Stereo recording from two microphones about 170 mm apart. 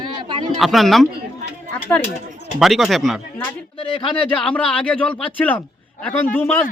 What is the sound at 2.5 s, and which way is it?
Speech, centre (ahead or behind).